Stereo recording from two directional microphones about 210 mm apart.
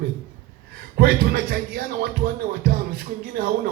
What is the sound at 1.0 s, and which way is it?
A man's voice, 45° right (ahead or behind).